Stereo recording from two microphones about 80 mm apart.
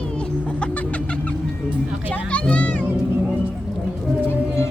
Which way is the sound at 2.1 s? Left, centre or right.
Centre.